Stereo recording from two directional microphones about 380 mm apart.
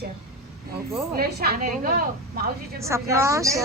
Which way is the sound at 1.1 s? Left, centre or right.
Right.